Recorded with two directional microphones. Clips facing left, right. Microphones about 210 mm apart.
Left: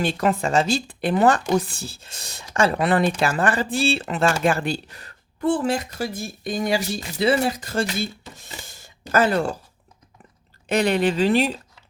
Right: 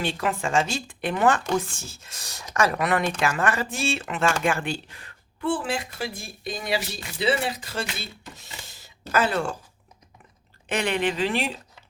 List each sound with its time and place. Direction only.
0.0 s speech: 40° left (ahead or behind)
10.7 s speech: 40° left (ahead or behind)